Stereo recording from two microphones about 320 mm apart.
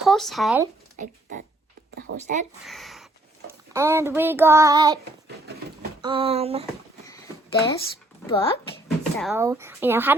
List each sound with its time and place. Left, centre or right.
0.0 s speech: centre
1.0 s speech: right
2.1 s speech: right
2.6 s a child's voice: centre
6.0 s speech: centre
8.3 s a child's voice: centre
9.2 s speech: centre